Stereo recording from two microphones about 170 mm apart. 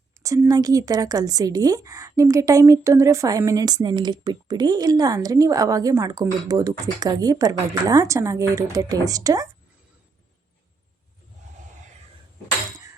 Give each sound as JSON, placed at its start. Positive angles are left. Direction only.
{"t": 0.2, "sound": "speech", "side_deg": -20}